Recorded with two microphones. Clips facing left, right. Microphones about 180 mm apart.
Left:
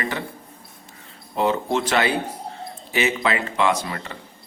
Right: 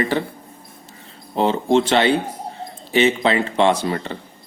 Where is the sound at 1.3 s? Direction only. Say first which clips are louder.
Right 5 dB; 30° right (ahead or behind).